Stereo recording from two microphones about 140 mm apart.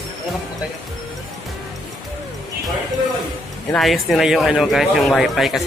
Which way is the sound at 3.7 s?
Centre (ahead or behind).